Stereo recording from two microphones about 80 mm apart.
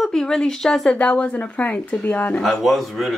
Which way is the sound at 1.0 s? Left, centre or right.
Centre.